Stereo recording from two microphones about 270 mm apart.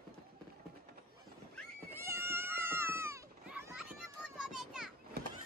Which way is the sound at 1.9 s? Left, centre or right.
Centre.